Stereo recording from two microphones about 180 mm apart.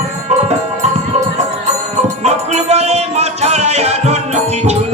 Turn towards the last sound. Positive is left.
turn(degrees=-35)  # may be behind; listen again after turning